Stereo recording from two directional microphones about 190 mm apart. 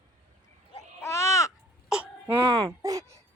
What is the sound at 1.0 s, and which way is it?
Baby cry, 15° left (ahead or behind).